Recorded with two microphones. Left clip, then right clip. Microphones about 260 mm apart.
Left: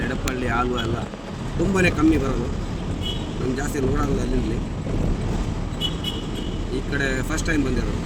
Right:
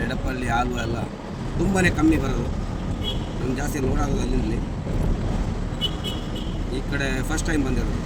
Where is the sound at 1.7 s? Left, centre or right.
Centre.